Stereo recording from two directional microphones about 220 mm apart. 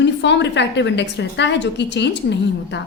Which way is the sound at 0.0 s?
55° left (ahead or behind).